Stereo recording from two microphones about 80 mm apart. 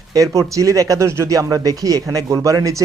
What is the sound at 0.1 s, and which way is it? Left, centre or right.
Speech, right.